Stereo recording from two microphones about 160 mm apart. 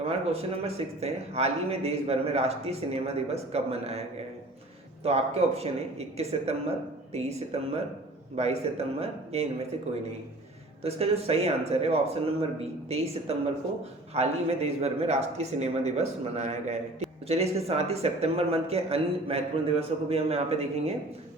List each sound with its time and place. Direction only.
0.0 s speech: 40° right (ahead or behind)
5.0 s speech: 40° right (ahead or behind)
10.8 s a man's voice: 40° right (ahead or behind)